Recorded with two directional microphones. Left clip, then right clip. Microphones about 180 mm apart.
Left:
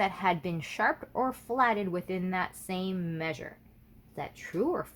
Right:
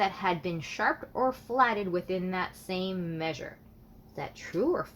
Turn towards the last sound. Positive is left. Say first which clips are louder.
# right 2 dB
turn(degrees=45)  # may be behind; listen again after turning